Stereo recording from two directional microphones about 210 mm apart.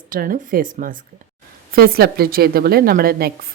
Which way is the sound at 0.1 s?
40° right (ahead or behind).